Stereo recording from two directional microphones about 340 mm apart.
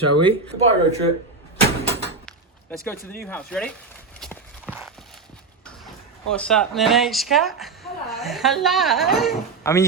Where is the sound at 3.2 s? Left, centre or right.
Centre.